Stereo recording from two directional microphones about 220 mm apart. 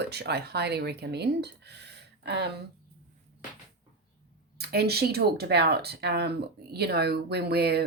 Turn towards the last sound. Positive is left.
turn(degrees=-45)  # may be behind; listen again after turning